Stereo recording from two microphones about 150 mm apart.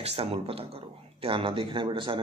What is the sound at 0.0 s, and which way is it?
A man's voice, 40° right (ahead or behind).